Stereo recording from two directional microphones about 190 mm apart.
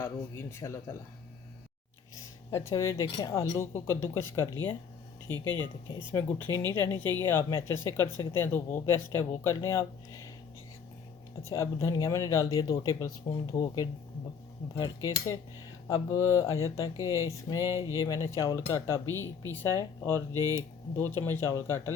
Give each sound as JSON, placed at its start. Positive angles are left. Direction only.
{"t": 0.0, "sound": "speech", "side_deg": 15}
{"t": 2.5, "sound": "speech", "side_deg": 15}
{"t": 5.3, "sound": "speech", "side_deg": -20}
{"t": 6.1, "sound": "speech", "side_deg": 10}
{"t": 11.4, "sound": "speech", "side_deg": 15}
{"t": 20.3, "sound": "speech", "side_deg": -20}
{"t": 20.9, "sound": "speech", "side_deg": 10}